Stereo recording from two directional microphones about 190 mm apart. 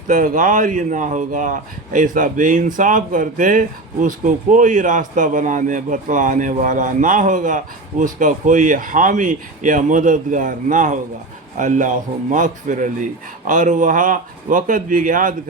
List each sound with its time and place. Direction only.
0.1 s a man's voice: 45° right (ahead or behind)